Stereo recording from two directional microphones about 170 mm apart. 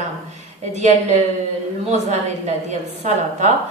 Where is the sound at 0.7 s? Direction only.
45° right (ahead or behind).